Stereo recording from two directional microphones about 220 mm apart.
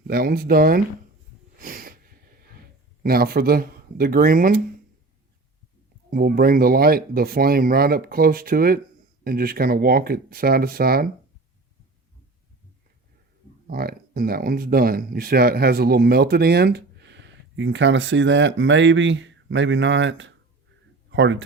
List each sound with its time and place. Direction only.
0.1 s speech: 40° right (ahead or behind)
1.5 s a sound: 40° right (ahead or behind)
3.0 s speech: 45° right (ahead or behind)
6.1 s speech: 40° right (ahead or behind)
13.7 s speech: 45° right (ahead or behind)